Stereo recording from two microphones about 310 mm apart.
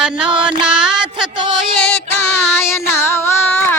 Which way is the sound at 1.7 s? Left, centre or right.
Left.